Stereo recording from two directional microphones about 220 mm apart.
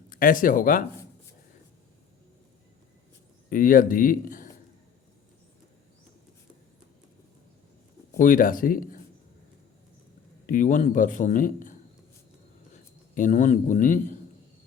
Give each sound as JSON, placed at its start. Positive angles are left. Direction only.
{"t": 0.1, "sound": "speech", "side_deg": 40}
{"t": 3.5, "sound": "a man's voice", "side_deg": 40}
{"t": 8.2, "sound": "a man's voice", "side_deg": 40}
{"t": 10.4, "sound": "a man's voice", "side_deg": 40}
{"t": 12.7, "sound": "a man's voice", "side_deg": 35}